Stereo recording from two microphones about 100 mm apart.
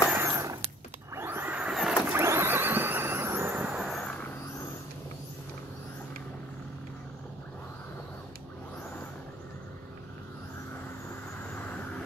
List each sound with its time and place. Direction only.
0.1 s a sound: 30° right (ahead or behind)
1.1 s vehicle: 25° right (ahead or behind); by 2.0 s 5° right (ahead or behind)
2.1 s vehicle: 25° right (ahead or behind)
3.7 s vehicle: centre (ahead or behind)
11.5 s vehicle: 15° left (ahead or behind)